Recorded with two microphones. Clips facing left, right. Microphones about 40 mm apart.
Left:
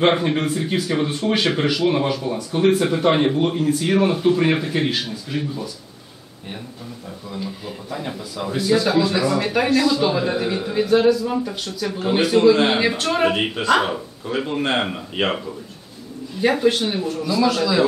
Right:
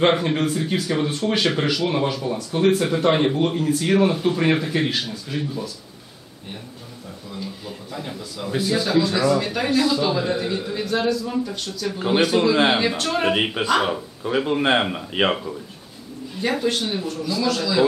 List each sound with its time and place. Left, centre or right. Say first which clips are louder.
0.0 s speech: left 1 dB; centre
7.3 s speech: left 3 dB; centre
9.8 s a man's voice: right 2 dB; centre
10.0 s speech: left 2 dB; centre
12.1 s a man's voice: left 3 dB; centre
13.3 s speech: right 1 dB; centre
13.7 s a man's voice: left 4 dB; centre
14.2 s speech: right 3 dB; centre
16.3 s speech: left 5 dB; centre